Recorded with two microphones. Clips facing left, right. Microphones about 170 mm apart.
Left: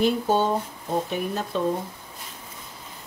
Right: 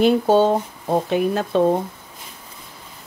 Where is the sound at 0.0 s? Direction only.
75° right (ahead or behind).